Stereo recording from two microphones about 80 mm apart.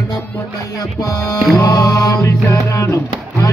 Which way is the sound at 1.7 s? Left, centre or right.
Left.